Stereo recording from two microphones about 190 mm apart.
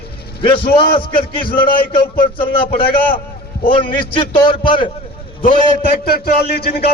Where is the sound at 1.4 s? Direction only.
50° left (ahead or behind).